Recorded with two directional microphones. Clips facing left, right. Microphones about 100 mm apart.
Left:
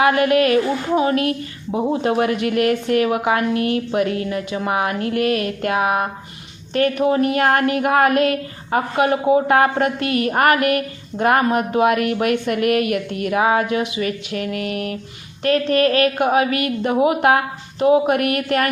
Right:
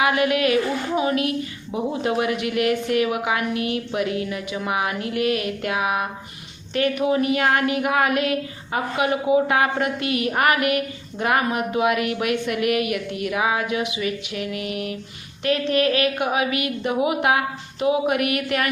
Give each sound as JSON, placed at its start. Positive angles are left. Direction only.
{"t": 0.0, "sound": "speech", "side_deg": 40}